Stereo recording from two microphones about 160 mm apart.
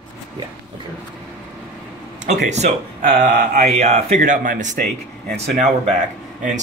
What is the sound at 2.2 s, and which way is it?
Speech, 45° right (ahead or behind).